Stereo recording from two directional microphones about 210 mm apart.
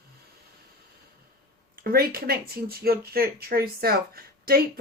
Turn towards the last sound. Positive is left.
turn(degrees=-45)  # may be behind; listen again after turning